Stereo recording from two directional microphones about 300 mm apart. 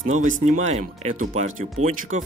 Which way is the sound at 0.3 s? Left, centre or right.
Right.